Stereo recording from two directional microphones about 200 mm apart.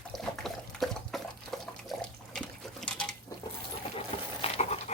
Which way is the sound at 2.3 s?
5° left (ahead or behind).